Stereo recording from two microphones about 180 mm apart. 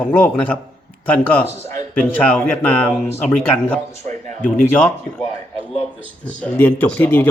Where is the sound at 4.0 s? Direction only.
40° right (ahead or behind).